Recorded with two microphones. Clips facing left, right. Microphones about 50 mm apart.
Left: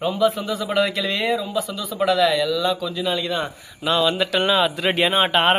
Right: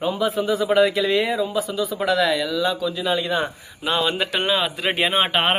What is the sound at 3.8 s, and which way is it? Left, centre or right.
Speech, right.